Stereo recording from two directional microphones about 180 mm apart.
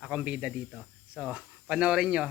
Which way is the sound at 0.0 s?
5° right (ahead or behind).